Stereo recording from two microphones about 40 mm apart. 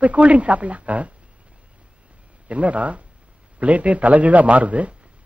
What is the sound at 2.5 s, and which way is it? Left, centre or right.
A woman's voice, right.